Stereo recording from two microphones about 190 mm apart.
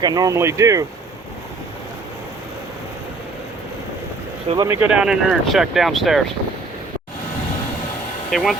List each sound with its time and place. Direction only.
0.0 s speech: 20° right (ahead or behind)
4.4 s speech: 20° right (ahead or behind)
4.7 s speech: 5° right (ahead or behind)
8.3 s speech: centre (ahead or behind)